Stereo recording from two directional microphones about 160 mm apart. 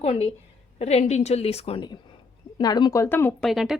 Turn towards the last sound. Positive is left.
turn(degrees=0)  # may be behind; listen again after turning